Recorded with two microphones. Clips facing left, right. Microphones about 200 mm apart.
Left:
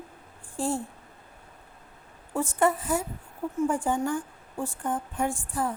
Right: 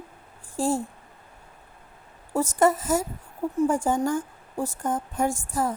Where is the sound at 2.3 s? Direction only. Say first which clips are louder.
Right 3 dB; 40° right (ahead or behind).